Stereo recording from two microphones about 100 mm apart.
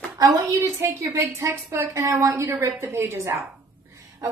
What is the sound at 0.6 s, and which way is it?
A woman's voice, 30° right (ahead or behind).